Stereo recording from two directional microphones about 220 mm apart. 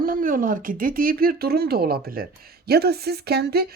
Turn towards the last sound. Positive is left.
turn(degrees=-45)  # may be behind; listen again after turning